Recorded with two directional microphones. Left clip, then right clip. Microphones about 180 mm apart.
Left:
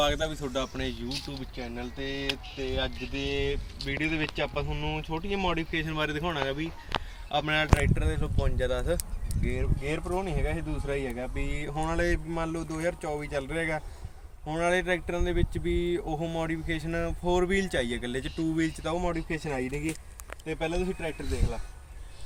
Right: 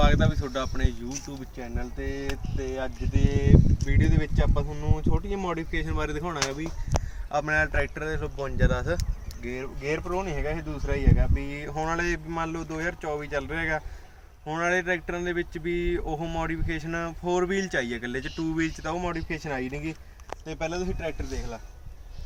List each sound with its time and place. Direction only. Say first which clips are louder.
0.0 s speech: right 2 dB; centre (ahead or behind)
11.3 s speech: right 2 dB; 15° left (ahead or behind); by 21.2 s 10° right (ahead or behind)